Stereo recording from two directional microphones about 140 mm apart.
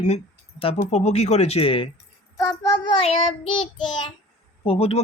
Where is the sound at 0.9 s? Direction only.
50° left (ahead or behind).